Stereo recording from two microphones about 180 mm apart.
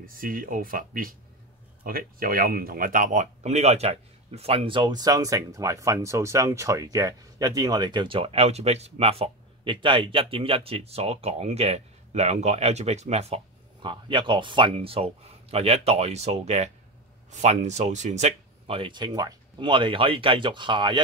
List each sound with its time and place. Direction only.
0.0 s speech: 50° right (ahead or behind); by 21.0 s 25° right (ahead or behind)